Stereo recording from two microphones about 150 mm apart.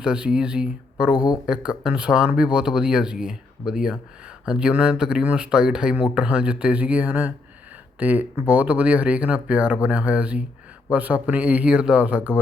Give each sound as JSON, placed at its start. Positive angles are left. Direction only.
{"t": 0.0, "sound": "speech", "side_deg": -5}
{"t": 1.1, "sound": "speech", "side_deg": 25}
{"t": 1.8, "sound": "speech", "side_deg": -5}